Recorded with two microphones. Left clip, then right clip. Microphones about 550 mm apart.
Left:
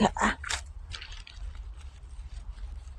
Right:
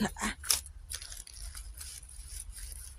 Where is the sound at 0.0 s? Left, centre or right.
Right.